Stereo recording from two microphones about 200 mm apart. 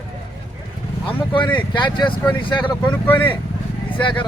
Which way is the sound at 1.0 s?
25° left (ahead or behind).